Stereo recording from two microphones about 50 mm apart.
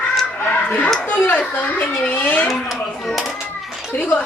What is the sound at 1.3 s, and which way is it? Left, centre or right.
A child's voice, left.